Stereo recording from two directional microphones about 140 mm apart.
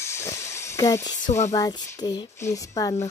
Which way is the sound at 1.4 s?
25° left (ahead or behind).